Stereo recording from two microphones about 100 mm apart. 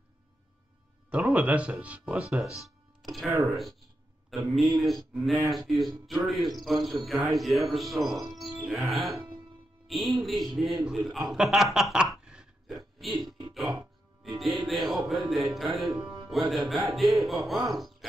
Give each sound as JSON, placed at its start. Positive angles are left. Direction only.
{"t": 1.1, "sound": "speech", "side_deg": -15}
{"t": 2.6, "sound": "music", "side_deg": 0}
{"t": 4.6, "sound": "speech", "side_deg": 0}
{"t": 8.3, "sound": "music", "side_deg": 0}
{"t": 8.5, "sound": "speech", "side_deg": -5}
{"t": 13.1, "sound": "music", "side_deg": -45}
{"t": 14.7, "sound": "speech", "side_deg": 0}